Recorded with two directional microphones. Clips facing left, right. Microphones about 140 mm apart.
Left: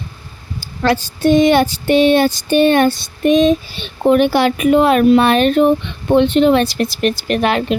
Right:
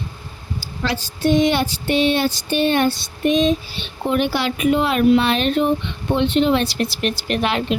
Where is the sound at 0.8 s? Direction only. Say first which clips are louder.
Left 6 dB; 50° left (ahead or behind).